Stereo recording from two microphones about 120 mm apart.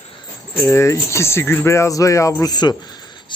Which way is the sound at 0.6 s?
25° left (ahead or behind).